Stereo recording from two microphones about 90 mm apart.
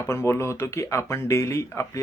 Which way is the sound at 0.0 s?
30° left (ahead or behind).